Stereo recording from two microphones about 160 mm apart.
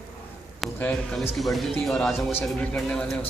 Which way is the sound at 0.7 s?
10° left (ahead or behind).